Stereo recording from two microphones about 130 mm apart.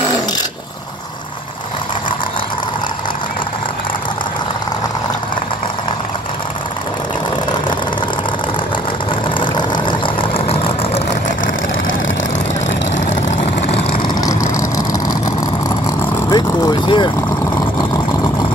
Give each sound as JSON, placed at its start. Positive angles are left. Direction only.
{"t": 9.4, "sound": "vehicle", "side_deg": 40}
{"t": 14.0, "sound": "vehicle", "side_deg": 25}
{"t": 16.3, "sound": "vehicle", "side_deg": 30}